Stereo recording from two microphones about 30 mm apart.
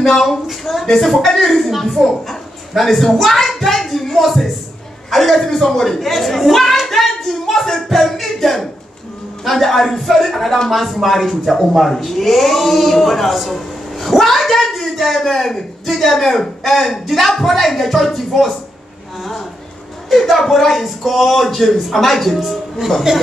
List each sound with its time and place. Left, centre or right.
0.0 s a woman's voice: centre
0.5 s a woman's voice: centre
20.1 s speech: centre
23.1 s speech: right